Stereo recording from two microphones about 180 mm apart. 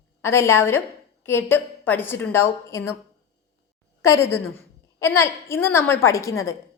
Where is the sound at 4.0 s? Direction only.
15° left (ahead or behind).